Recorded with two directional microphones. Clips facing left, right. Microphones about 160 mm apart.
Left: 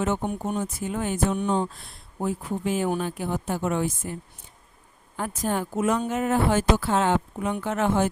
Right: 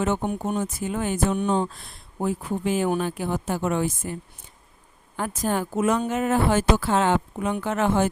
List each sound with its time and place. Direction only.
0.0 s speech: 90° right; by 1.6 s 70° right (ahead or behind)
2.2 s speech: 90° right
5.1 s speech: 90° right